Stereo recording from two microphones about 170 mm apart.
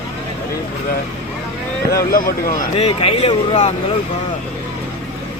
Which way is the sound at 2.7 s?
35° left (ahead or behind).